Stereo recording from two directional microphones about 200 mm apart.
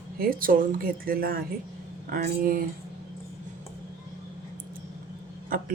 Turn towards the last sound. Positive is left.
turn(degrees=-45)  # may be behind; listen again after turning